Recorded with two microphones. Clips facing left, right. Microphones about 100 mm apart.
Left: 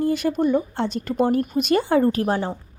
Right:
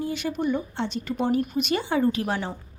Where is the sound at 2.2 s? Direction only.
35° left (ahead or behind).